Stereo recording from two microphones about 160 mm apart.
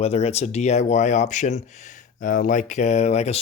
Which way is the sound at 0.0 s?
40° left (ahead or behind).